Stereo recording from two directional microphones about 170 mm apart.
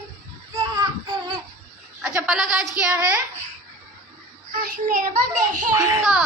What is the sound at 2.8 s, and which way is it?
Speech, 10° right (ahead or behind).